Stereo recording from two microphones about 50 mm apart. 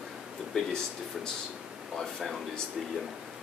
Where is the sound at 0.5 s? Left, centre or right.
Centre.